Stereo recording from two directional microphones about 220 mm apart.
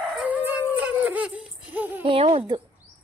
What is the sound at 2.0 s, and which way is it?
Speech, 25° right (ahead or behind).